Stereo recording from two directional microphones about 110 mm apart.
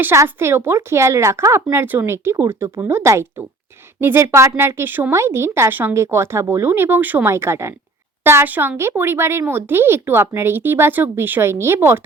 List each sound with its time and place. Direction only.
0.0 s speech: 20° right (ahead or behind)